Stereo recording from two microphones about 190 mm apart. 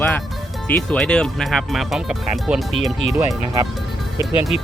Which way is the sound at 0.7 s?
5° left (ahead or behind).